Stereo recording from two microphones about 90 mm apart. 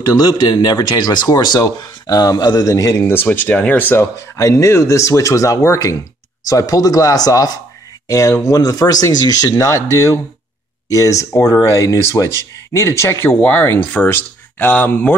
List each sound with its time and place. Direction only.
0.2 s speech: 45° left (ahead or behind)
3.0 s speech: 25° left (ahead or behind)